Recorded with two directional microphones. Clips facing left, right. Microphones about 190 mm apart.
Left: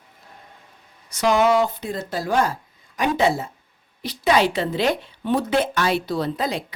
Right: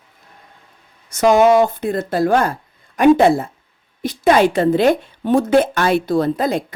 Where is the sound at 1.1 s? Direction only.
50° right (ahead or behind).